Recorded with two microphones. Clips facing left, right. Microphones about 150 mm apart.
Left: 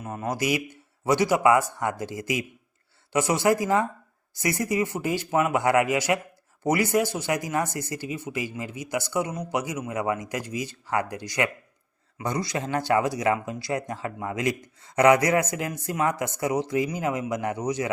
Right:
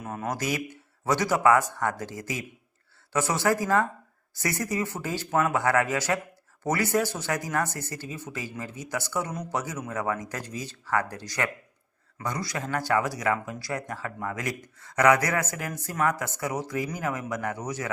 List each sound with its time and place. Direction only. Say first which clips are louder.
0.0 s speech: left 3 dB; 5° left (ahead or behind)